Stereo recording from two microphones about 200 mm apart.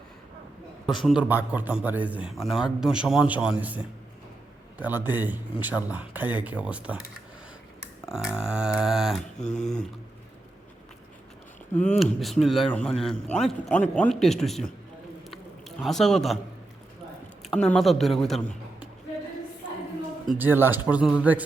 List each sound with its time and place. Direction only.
0.9 s a man's voice: centre (ahead or behind)
8.0 s a man's voice: 5° right (ahead or behind)
9.4 s speech: 35° left (ahead or behind)
11.7 s speech: 35° left (ahead or behind)
11.9 s a man's voice: centre (ahead or behind)
15.3 s a sound: centre (ahead or behind)
17.4 s speech: 5° left (ahead or behind)
20.2 s speech: 10° right (ahead or behind)